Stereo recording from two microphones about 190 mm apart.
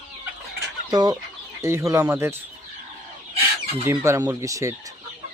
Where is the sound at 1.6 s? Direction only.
15° right (ahead or behind).